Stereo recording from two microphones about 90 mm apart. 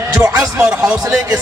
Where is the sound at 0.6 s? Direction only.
10° right (ahead or behind).